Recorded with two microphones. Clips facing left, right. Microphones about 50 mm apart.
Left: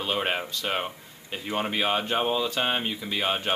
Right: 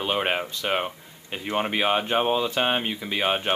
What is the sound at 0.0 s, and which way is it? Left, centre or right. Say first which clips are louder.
Speech: right 2 dB; centre.